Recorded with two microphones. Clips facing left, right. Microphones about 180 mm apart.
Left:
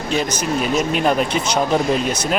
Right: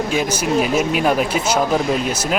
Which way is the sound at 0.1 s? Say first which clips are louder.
Left 2 dB; 10° right (ahead or behind).